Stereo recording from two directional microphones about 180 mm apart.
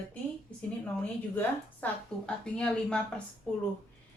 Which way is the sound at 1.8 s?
10° left (ahead or behind).